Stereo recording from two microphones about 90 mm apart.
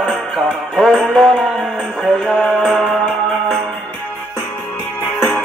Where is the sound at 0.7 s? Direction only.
Centre (ahead or behind).